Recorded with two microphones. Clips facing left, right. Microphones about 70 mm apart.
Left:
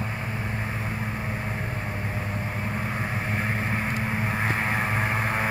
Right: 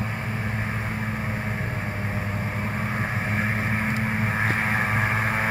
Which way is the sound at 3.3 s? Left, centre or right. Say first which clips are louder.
Right 2 dB; centre.